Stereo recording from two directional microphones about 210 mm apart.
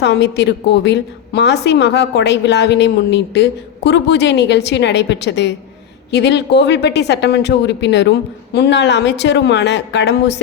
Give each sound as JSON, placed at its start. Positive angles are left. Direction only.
{"t": 0.0, "sound": "a woman's voice", "side_deg": 55}